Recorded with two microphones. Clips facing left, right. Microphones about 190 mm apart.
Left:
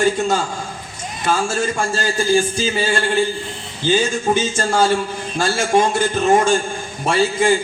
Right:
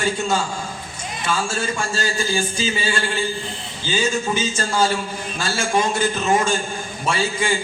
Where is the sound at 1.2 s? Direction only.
45° left (ahead or behind).